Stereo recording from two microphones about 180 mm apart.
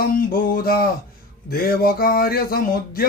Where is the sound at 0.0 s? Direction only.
55° left (ahead or behind).